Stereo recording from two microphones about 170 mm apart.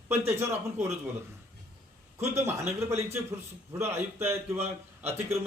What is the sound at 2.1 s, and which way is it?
A man's voice, 15° right (ahead or behind).